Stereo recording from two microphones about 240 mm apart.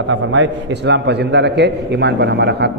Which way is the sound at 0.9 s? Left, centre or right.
Right.